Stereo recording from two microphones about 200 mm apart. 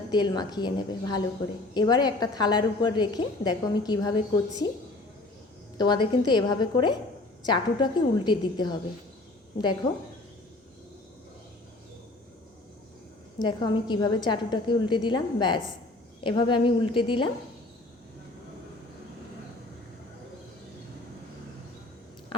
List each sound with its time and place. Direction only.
0.1 s a woman's voice: 20° left (ahead or behind)
5.7 s a woman's voice: 20° left (ahead or behind)
13.4 s a woman's voice: 20° left (ahead or behind)